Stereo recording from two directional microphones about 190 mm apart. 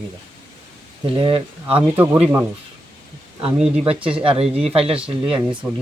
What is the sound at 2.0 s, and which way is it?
Speech, 10° right (ahead or behind).